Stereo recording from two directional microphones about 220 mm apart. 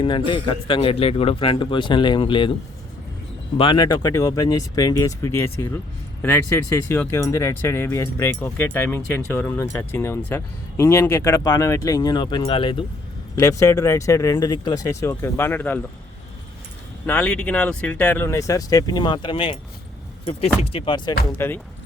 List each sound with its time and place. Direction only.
0.0 s a man's voice: 20° left (ahead or behind)
3.6 s speech: 20° left (ahead or behind)
17.1 s a man's voice: 5° left (ahead or behind)
21.3 s speech: 10° left (ahead or behind)